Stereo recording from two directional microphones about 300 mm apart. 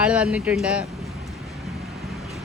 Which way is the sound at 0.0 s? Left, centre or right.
Centre.